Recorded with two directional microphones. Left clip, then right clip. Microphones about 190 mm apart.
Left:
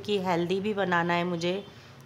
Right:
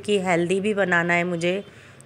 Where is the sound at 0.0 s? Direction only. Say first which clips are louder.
Right 6 dB; 10° right (ahead or behind).